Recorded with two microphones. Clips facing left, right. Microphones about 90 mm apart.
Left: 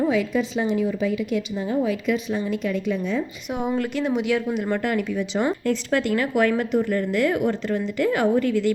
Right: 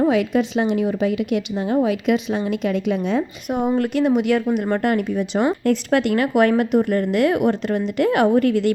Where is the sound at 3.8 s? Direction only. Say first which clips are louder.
Right 5 dB; 55° right (ahead or behind).